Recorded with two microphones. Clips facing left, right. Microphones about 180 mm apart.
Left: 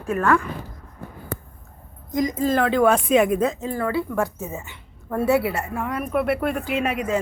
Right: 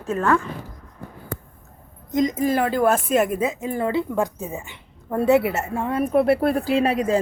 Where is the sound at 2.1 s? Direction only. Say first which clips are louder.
Right 1 dB; 20° right (ahead or behind).